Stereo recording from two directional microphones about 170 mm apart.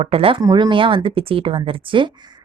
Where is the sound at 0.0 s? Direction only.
35° right (ahead or behind).